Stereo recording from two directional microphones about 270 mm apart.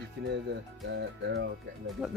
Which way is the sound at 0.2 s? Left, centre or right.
Right.